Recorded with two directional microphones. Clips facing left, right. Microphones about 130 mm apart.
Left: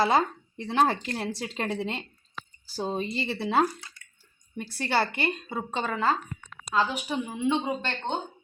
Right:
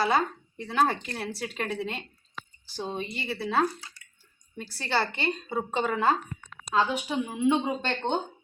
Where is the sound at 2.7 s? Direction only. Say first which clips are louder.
Left 4 dB; 40° left (ahead or behind).